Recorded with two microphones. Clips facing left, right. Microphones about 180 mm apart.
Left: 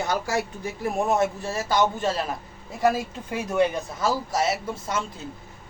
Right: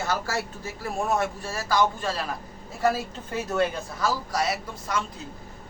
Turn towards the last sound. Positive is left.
turn(degrees=25)  # may be behind; listen again after turning